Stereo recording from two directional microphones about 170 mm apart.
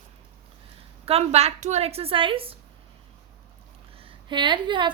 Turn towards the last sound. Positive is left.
turn(degrees=-25)  # may be behind; listen again after turning